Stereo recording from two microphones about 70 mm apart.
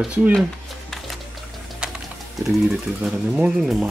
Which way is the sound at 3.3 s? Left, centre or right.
Centre.